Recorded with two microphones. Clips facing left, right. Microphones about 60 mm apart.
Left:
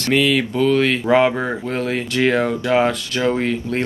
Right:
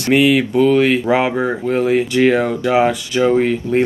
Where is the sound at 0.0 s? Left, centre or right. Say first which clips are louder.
Right 4 dB; centre.